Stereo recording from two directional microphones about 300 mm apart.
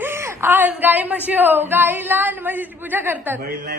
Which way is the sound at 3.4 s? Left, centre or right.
Right.